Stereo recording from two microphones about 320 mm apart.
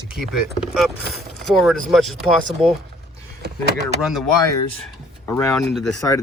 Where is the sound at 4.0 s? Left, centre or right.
Centre.